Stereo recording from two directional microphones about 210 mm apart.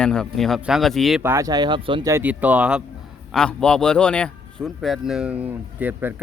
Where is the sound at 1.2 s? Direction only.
15° right (ahead or behind).